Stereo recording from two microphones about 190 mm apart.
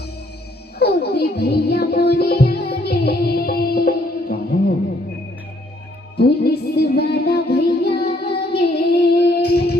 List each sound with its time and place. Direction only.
0.8 s music: 55° left (ahead or behind)
6.1 s music: 60° left (ahead or behind)
7.5 s child singing: 60° left (ahead or behind)